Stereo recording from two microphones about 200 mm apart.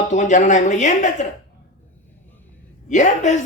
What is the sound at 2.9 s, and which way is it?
Speech, 35° left (ahead or behind).